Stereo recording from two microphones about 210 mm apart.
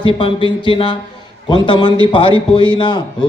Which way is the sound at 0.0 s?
25° left (ahead or behind).